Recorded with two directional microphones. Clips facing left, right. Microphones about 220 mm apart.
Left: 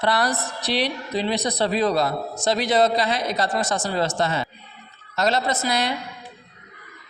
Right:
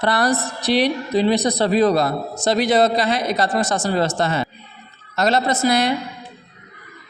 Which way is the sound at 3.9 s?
60° right (ahead or behind).